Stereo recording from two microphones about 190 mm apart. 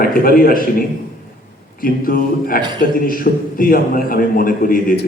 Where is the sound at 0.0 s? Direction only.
50° left (ahead or behind).